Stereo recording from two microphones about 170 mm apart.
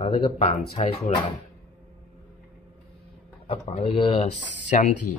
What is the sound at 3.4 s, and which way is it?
Speech, 40° left (ahead or behind).